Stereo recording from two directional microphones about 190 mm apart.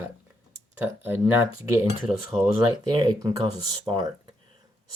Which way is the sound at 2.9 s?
20° right (ahead or behind).